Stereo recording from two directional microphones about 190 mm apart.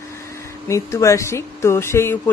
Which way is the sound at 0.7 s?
15° left (ahead or behind).